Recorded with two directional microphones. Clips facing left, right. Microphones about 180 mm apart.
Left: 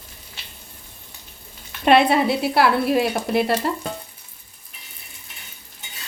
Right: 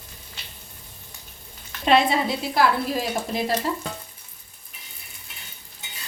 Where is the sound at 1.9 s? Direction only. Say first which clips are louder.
Left 4 dB; 65° left (ahead or behind).